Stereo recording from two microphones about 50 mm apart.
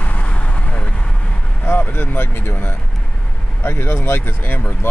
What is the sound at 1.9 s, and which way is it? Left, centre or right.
Speech, left.